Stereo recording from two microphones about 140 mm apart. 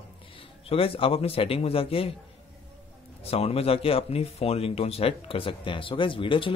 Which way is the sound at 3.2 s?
45° left (ahead or behind).